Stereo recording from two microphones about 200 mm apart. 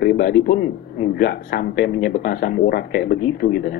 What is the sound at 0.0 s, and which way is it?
A man's voice, 50° left (ahead or behind).